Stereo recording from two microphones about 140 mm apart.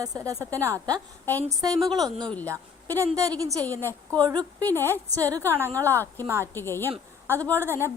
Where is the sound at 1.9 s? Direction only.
30° right (ahead or behind).